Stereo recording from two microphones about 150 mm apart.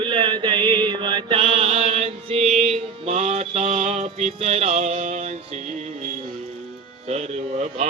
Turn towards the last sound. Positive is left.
turn(degrees=-45)  # may be behind; listen again after turning